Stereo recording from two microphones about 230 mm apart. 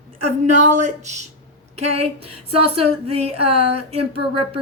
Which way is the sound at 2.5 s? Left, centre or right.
Right.